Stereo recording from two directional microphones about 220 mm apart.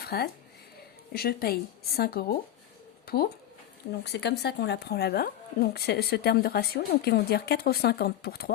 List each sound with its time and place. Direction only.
0.0 s speech: 45° left (ahead or behind)